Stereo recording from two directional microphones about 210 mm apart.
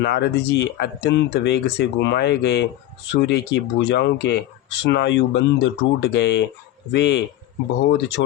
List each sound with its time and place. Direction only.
0.0 s speech: 50° left (ahead or behind)